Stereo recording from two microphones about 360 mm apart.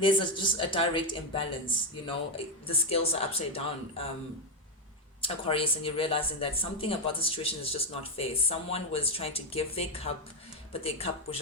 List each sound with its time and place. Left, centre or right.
0.0 s speech: centre
5.2 s speech: centre